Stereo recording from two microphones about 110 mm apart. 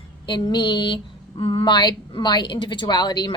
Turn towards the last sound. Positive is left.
turn(degrees=40)  # may be behind; listen again after turning